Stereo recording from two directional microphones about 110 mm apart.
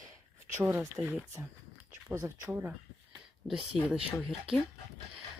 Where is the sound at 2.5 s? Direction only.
15° right (ahead or behind).